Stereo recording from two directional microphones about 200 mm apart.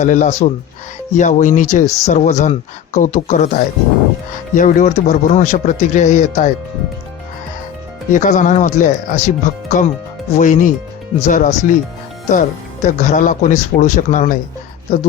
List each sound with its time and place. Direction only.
0.0 s speech: 35° left (ahead or behind)
8.1 s speech: 40° left (ahead or behind)